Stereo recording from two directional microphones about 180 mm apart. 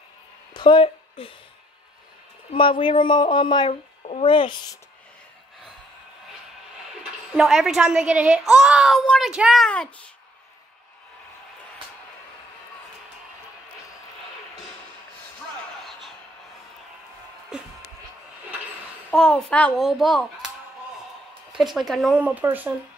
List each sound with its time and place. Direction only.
0.6 s a sound: 25° left (ahead or behind)
2.5 s speech: 30° left (ahead or behind)
7.3 s a woman's voice: centre (ahead or behind)
17.5 s speech: 5° right (ahead or behind)
19.0 s a woman's voice: 5° left (ahead or behind)
21.5 s a woman's voice: centre (ahead or behind)